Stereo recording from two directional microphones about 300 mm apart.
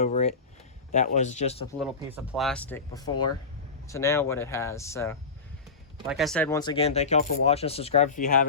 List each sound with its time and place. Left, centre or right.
0.0 s speech: left
2.1 s speech: centre; by 8.4 s left